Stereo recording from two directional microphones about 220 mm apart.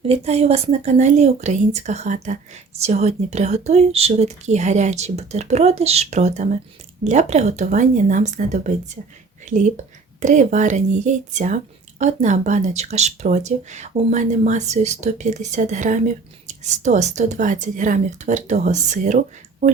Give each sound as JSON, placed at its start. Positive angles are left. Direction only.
{"t": 0.0, "sound": "speech", "side_deg": -25}